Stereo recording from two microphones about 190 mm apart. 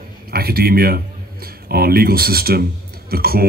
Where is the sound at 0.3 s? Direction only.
55° right (ahead or behind).